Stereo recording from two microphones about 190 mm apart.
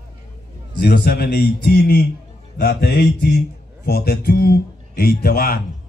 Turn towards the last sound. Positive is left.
turn(degrees=50)  # may be behind; listen again after turning